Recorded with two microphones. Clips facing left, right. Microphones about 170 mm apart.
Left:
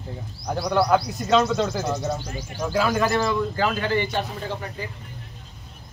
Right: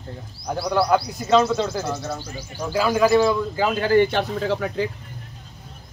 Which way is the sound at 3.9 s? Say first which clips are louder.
Right 7 dB; 70° right (ahead or behind).